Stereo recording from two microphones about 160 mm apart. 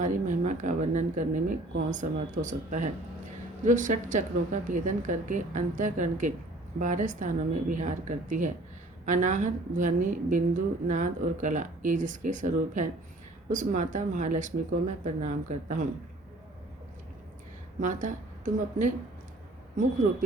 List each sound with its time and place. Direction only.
0.0 s a woman's voice: 50° right (ahead or behind)
17.7 s a woman's voice: 55° right (ahead or behind)